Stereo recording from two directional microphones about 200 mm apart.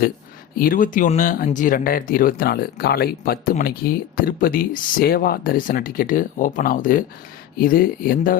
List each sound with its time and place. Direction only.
0.6 s speech: 45° left (ahead or behind)